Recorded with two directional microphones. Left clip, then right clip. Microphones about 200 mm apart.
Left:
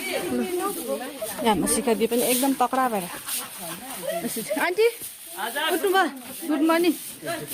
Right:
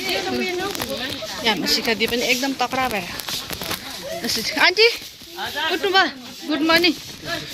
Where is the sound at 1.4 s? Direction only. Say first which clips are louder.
Right 3 dB; 40° left (ahead or behind); by 3.0 s 20° left (ahead or behind).